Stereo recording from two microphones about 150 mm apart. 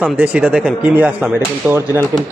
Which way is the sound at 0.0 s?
10° right (ahead or behind).